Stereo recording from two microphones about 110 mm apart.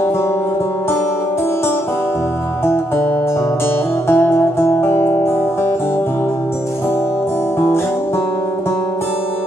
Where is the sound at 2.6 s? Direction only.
20° left (ahead or behind).